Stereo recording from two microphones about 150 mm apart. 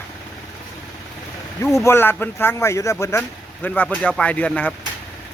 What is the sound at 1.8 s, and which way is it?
Speech, 15° left (ahead or behind).